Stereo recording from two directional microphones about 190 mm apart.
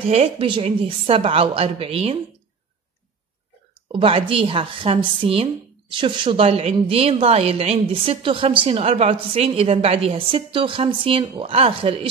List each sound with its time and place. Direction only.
0.0 s a woman's voice: 30° right (ahead or behind)
3.9 s a woman's voice: 30° right (ahead or behind)